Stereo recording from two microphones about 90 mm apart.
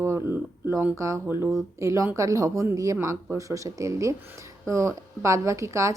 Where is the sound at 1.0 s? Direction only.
35° right (ahead or behind).